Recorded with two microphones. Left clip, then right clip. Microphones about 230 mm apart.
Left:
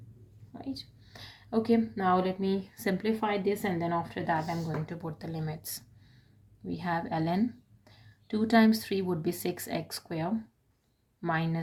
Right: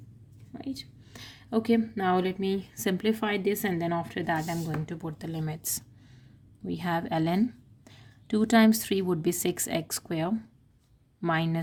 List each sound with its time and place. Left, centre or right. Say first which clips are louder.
0.8 s speech: right 2 dB; right